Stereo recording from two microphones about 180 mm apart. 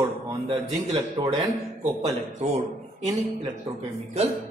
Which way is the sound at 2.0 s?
35° right (ahead or behind).